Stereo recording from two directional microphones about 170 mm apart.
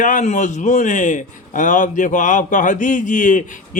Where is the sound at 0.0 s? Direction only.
50° left (ahead or behind).